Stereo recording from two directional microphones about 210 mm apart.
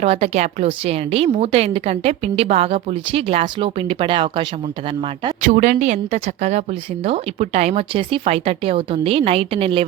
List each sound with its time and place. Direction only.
0.0 s a woman's voice: 30° right (ahead or behind)
5.4 s a woman's voice: 40° right (ahead or behind)